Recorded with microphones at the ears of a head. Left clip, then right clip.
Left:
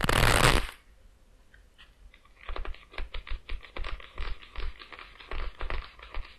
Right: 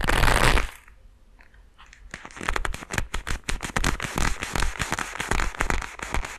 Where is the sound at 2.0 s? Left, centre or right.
Right.